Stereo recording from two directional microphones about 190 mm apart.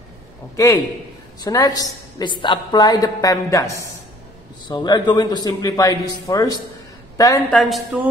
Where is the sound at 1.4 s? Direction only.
20° left (ahead or behind).